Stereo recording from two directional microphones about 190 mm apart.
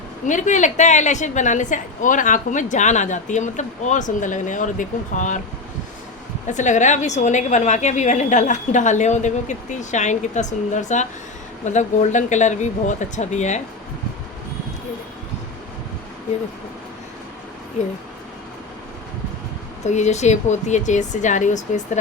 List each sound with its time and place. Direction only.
0.3 s a woman's voice: 40° left (ahead or behind)
6.5 s a woman's voice: 40° left (ahead or behind)
19.8 s a woman's voice: 35° left (ahead or behind)